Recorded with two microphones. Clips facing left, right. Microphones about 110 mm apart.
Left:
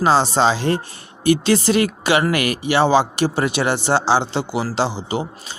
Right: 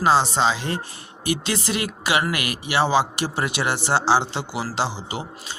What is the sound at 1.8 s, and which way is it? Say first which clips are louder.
A man's voice: left 6 dB; 35° left (ahead or behind).